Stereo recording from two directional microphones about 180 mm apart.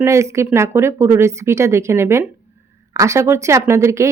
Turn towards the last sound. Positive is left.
turn(degrees=-15)  # may be behind; listen again after turning